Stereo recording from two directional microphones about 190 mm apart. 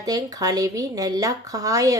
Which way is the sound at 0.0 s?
20° right (ahead or behind).